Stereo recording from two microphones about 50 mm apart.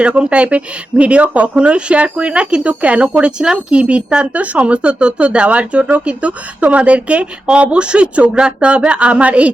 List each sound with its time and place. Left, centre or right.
0.0 s speech: right